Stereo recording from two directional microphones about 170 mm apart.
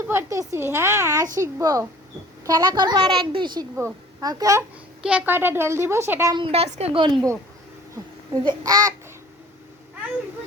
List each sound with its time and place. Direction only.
0.0 s a woman's voice: 15° right (ahead or behind)
5.0 s speech: 10° right (ahead or behind)
6.3 s a woman's voice: 35° right (ahead or behind)
8.4 s a woman's voice: 20° right (ahead or behind)